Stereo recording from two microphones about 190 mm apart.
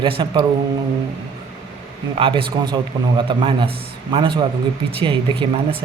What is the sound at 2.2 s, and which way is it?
A man's voice, 25° right (ahead or behind).